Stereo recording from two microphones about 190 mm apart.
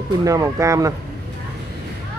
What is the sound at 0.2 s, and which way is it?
Speech, 15° right (ahead or behind).